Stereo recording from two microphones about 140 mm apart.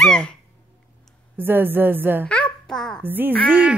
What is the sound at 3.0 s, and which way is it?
Speech, 15° right (ahead or behind).